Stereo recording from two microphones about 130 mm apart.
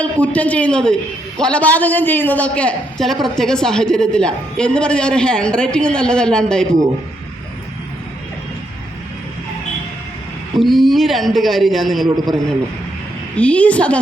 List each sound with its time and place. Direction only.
0.0 s a man's voice: 10° left (ahead or behind)
10.6 s a man's voice: centre (ahead or behind)
12.0 s a man's voice: 30° right (ahead or behind)
13.3 s a man's voice: 10° left (ahead or behind)